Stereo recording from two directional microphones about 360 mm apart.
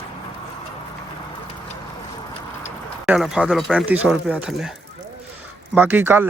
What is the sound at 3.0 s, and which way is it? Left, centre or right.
Speech, centre.